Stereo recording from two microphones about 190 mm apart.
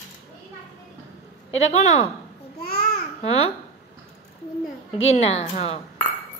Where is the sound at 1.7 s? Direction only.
35° left (ahead or behind).